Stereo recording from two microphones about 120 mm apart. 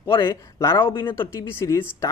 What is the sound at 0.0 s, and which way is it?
Speech, 25° left (ahead or behind).